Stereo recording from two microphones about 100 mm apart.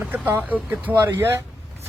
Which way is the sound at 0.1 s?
15° right (ahead or behind).